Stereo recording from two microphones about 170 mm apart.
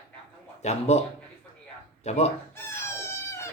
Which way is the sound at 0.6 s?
40° left (ahead or behind).